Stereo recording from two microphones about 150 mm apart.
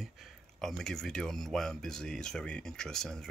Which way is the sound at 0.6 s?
5° left (ahead or behind).